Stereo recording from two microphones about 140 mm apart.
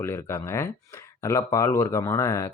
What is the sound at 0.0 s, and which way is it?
Speech, 20° left (ahead or behind).